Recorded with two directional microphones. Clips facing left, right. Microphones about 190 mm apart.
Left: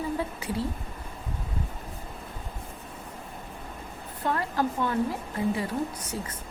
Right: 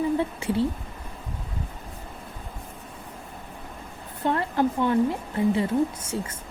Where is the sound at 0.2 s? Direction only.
25° right (ahead or behind).